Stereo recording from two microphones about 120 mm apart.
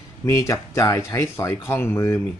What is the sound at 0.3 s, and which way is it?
Speech, 25° left (ahead or behind).